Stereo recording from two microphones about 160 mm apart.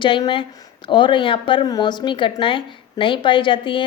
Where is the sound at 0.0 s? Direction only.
30° left (ahead or behind).